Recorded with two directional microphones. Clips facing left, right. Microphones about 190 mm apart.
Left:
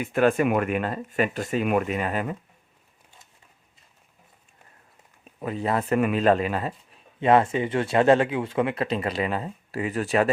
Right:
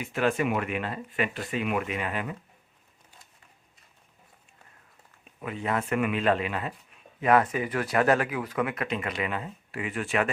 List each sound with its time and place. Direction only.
0.0 s speech: 50° left (ahead or behind)
5.2 s speech: 35° left (ahead or behind)